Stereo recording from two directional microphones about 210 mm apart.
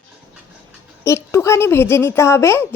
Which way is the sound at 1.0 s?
15° left (ahead or behind).